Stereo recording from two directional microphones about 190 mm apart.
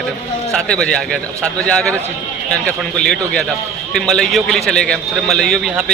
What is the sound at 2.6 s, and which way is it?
A man's voice, 5° left (ahead or behind).